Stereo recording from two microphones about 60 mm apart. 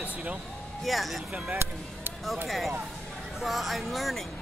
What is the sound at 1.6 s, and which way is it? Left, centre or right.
Speech, right.